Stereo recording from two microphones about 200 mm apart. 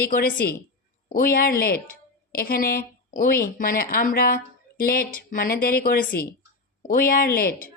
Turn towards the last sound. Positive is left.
turn(degrees=45)  # may be behind; listen again after turning